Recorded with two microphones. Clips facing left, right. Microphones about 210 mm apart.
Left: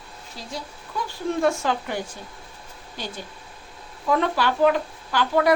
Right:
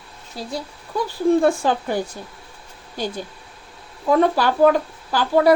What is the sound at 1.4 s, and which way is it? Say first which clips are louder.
Speech: right 4 dB; 35° right (ahead or behind).